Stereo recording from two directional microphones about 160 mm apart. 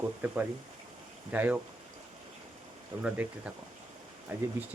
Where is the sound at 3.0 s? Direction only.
5° right (ahead or behind).